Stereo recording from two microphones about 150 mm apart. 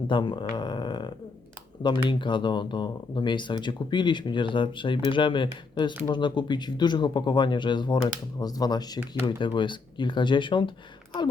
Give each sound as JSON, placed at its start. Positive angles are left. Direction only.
{"t": 0.1, "sound": "speech", "side_deg": 30}